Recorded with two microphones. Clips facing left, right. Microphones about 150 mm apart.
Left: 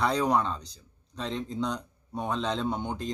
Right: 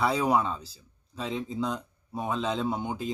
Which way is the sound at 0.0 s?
5° right (ahead or behind).